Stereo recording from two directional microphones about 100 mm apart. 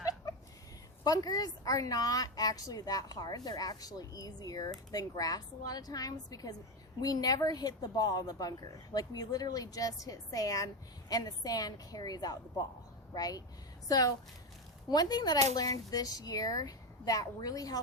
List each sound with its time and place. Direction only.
1.0 s a woman's voice: 40° left (ahead or behind)